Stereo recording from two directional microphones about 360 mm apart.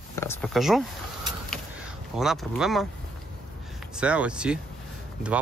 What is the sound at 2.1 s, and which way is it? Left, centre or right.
Speech, centre.